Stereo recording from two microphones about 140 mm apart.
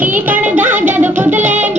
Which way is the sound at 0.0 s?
10° right (ahead or behind).